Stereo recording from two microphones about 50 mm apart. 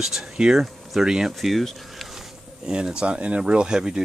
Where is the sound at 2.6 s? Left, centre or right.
Centre.